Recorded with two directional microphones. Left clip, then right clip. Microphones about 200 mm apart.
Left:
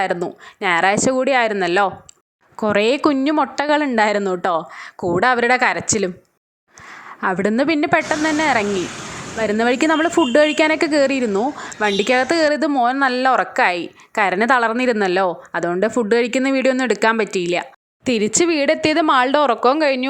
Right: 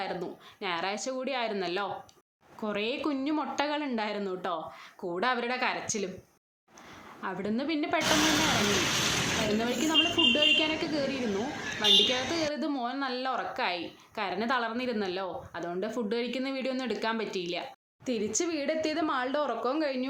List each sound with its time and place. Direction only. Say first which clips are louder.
0.0 s a woman's voice: left 14 dB; 45° left (ahead or behind)
7.2 s a woman's voice: left 16 dB; 50° left (ahead or behind)
9.6 s a woman's voice: left 12 dB; 50° left (ahead or behind)